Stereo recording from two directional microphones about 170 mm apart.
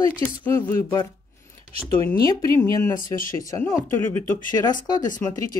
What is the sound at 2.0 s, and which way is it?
Speech, 20° left (ahead or behind).